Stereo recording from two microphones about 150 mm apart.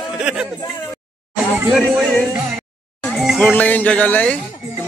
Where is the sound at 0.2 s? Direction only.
5° right (ahead or behind).